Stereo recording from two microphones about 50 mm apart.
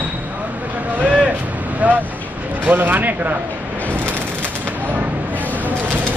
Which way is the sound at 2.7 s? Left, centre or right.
Right.